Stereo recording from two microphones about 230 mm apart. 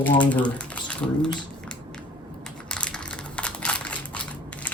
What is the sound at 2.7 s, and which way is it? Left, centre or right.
Crumpling, centre.